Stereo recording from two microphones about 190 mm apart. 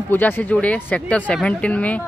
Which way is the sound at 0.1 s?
10° left (ahead or behind).